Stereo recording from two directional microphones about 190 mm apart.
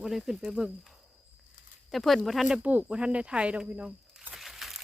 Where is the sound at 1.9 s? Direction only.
Centre (ahead or behind).